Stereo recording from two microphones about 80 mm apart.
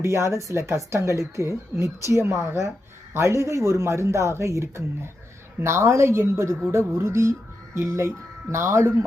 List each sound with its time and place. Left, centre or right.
0.0 s a woman's voice: right